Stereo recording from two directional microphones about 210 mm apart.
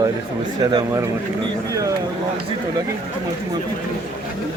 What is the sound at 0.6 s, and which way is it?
Speech, 20° right (ahead or behind).